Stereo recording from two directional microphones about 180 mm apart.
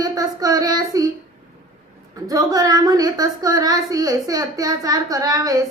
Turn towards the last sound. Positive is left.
turn(degrees=-20)  # may be behind; listen again after turning